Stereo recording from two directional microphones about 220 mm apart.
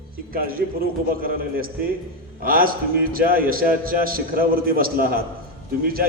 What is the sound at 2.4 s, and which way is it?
A man's voice, 40° right (ahead or behind).